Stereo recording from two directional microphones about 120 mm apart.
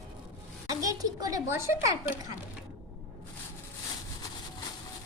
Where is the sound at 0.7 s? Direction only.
30° right (ahead or behind).